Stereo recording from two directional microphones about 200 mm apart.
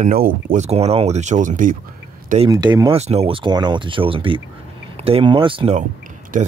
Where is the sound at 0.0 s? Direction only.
45° right (ahead or behind).